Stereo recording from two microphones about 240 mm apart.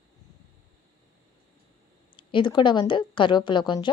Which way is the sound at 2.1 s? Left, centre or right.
Centre.